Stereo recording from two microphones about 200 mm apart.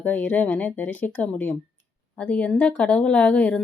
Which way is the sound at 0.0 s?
10° left (ahead or behind).